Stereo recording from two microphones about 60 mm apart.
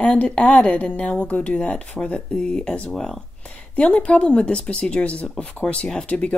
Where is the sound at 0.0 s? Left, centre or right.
Centre.